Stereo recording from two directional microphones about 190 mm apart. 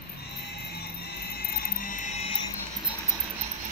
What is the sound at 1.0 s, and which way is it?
Music, 55° left (ahead or behind).